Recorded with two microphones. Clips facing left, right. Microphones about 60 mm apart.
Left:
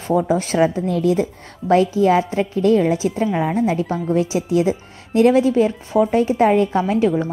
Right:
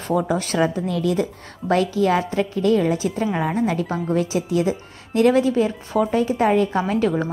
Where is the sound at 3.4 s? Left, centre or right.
Centre.